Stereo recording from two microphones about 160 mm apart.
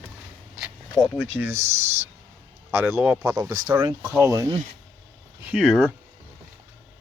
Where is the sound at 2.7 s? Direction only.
10° right (ahead or behind).